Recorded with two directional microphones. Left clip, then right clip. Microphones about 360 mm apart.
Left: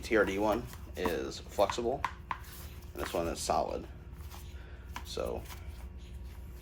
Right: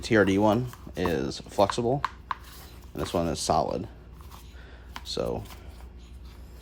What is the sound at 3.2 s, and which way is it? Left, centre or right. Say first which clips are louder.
Speech: right 6 dB; right.